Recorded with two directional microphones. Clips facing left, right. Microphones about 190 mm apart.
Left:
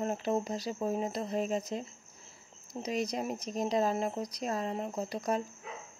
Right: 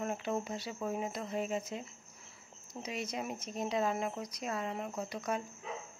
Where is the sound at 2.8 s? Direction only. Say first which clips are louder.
Left 6 dB; 35° left (ahead or behind).